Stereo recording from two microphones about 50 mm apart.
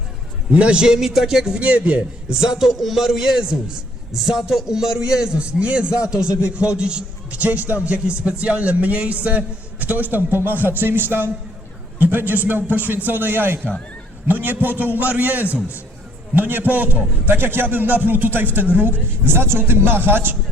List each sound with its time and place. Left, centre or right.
0.5 s a man's voice: right
1.5 s a man's voice: right
9.8 s a man's voice: right